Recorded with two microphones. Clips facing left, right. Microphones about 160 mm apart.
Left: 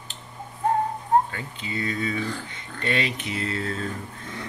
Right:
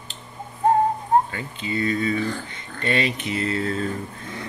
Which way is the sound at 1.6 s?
65° right (ahead or behind).